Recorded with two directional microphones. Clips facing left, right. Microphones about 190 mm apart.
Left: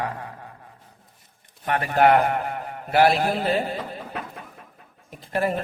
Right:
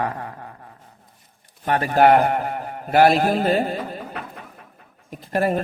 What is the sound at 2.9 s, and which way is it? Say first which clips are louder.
Speech: right 3 dB; 45° right (ahead or behind).